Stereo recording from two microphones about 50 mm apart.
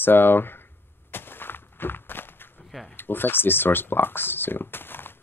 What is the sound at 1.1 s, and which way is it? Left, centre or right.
Walk, left.